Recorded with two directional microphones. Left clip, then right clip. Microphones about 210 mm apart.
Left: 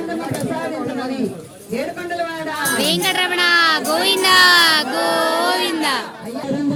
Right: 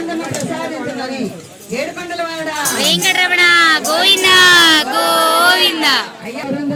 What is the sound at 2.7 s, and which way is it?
Speech, 25° left (ahead or behind).